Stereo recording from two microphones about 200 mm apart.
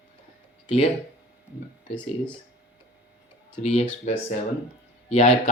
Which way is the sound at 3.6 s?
35° left (ahead or behind).